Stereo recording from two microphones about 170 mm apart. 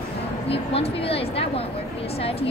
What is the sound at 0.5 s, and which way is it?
Speech, 35° left (ahead or behind).